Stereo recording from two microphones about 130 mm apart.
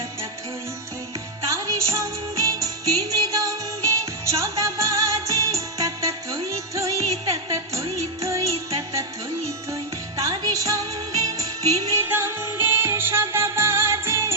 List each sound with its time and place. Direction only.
1.4 s music: 25° right (ahead or behind)
9.7 s music: 25° right (ahead or behind)